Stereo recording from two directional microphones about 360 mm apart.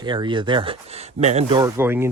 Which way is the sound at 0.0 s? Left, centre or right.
Centre.